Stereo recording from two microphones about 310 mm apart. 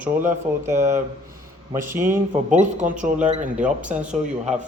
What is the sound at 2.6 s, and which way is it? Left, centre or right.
Speech, right.